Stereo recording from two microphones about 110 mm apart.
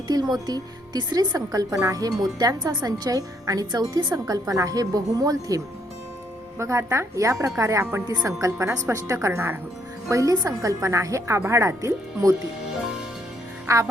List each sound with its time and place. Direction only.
0.1 s a woman's voice: 35° right (ahead or behind)
13.7 s a woman's voice: 30° right (ahead or behind)